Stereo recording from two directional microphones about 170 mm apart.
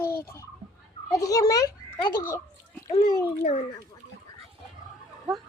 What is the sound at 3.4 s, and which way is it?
Speech, 40° left (ahead or behind).